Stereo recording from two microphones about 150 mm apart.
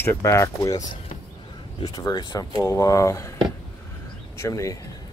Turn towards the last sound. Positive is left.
turn(degrees=20)  # may be behind; listen again after turning